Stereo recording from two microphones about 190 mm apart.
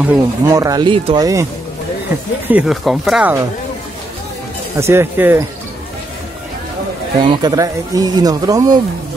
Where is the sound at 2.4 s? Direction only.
5° right (ahead or behind).